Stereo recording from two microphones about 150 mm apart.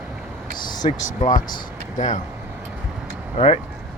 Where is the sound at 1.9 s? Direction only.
55° left (ahead or behind).